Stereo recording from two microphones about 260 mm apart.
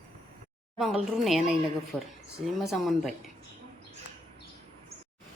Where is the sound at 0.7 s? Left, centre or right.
Centre.